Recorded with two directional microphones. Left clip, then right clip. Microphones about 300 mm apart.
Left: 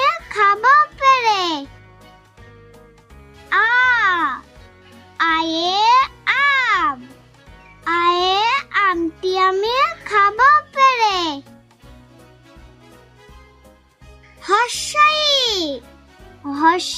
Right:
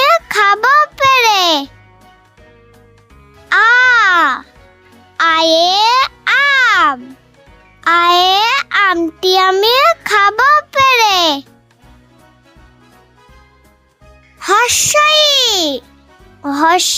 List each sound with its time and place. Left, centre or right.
0.0 s music: right
3.5 s music: right
7.9 s a sound: right
14.3 s music: right